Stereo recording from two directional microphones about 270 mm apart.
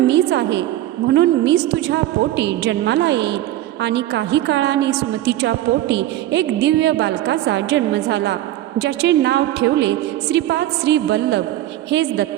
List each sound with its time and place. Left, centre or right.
0.1 s a woman's voice: right